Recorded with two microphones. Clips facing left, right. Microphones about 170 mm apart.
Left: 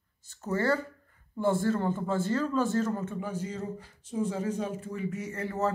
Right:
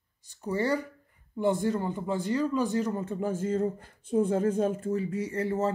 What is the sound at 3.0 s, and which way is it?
A man's voice, 45° right (ahead or behind).